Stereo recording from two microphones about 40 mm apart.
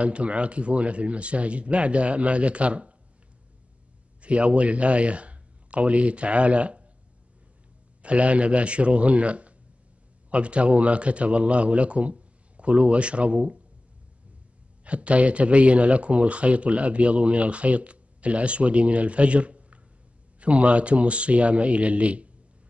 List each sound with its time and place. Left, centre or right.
0.0 s speech: right
4.2 s a man's voice: right
8.0 s speech: right
14.9 s speech: right